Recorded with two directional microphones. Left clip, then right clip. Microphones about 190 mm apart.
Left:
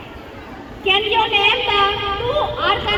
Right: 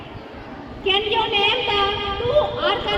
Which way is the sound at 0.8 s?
30° left (ahead or behind).